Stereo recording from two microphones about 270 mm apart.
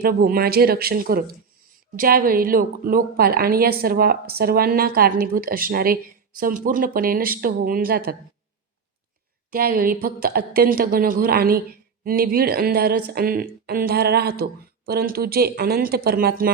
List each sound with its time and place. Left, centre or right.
0.0 s a woman's voice: right
9.5 s a woman's voice: right